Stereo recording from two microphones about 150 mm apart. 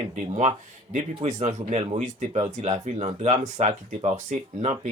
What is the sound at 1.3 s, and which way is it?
Speech, 50° right (ahead or behind).